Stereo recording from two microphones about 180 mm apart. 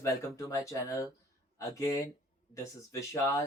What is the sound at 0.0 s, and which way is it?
Speech, 15° left (ahead or behind).